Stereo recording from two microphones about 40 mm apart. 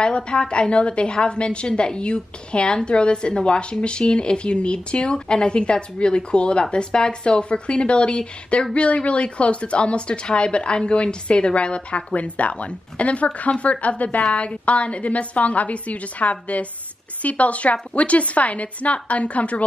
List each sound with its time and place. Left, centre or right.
0.0 s a woman's voice: left